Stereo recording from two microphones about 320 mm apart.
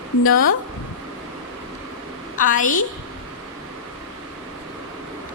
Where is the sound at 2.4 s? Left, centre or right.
Left.